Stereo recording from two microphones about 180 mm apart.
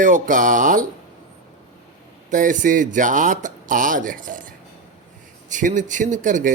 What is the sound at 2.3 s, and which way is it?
Speech, 45° right (ahead or behind).